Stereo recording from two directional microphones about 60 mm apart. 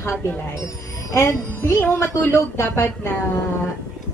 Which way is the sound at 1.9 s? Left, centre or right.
Left.